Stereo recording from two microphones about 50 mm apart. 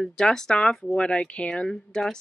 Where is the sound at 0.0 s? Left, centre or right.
Centre.